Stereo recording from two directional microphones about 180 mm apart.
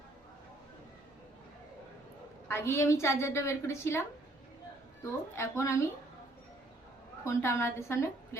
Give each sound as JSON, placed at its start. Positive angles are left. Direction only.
{"t": 2.5, "sound": "a woman's voice", "side_deg": 15}
{"t": 5.4, "sound": "a woman's voice", "side_deg": 15}
{"t": 7.3, "sound": "a woman's voice", "side_deg": 15}